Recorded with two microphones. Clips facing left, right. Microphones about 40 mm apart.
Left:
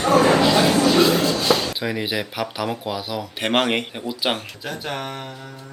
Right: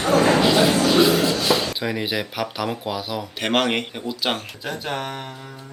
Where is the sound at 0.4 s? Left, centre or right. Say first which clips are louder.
Left 1 dB; centre.